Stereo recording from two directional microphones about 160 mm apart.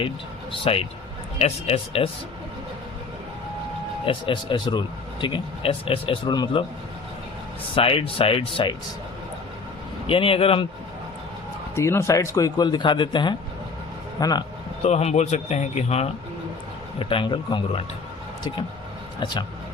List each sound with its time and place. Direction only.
1.4 s a man's voice: 40° left (ahead or behind)
4.0 s a man's voice: 30° left (ahead or behind)
7.8 s a man's voice: 35° left (ahead or behind)
10.1 s a man's voice: 35° left (ahead or behind)
11.7 s speech: 15° left (ahead or behind)
14.8 s a man's voice: 40° left (ahead or behind)
17.0 s a man's voice: 35° left (ahead or behind)
19.2 s speech: 30° left (ahead or behind)